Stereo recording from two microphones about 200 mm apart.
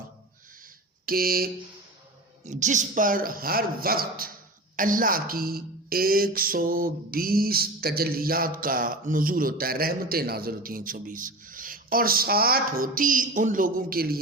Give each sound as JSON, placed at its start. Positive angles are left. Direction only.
{"t": 1.0, "sound": "speech", "side_deg": -45}
{"t": 2.4, "sound": "speech", "side_deg": -35}